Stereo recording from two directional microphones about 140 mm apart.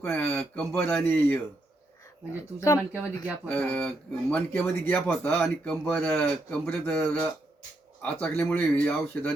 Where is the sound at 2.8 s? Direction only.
10° right (ahead or behind).